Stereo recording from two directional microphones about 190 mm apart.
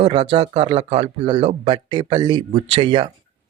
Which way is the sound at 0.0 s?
30° right (ahead or behind).